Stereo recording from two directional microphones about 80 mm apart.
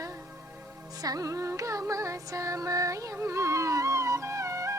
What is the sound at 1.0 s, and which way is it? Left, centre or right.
Music, right.